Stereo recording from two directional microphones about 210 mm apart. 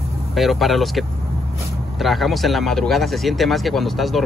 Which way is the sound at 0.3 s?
Centre (ahead or behind).